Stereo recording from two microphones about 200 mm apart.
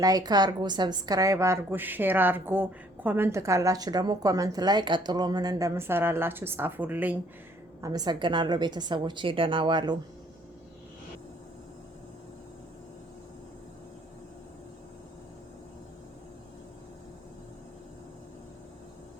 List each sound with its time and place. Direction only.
0.0 s a woman's voice: 20° right (ahead or behind)